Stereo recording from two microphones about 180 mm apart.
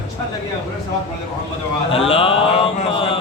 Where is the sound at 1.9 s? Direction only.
30° left (ahead or behind).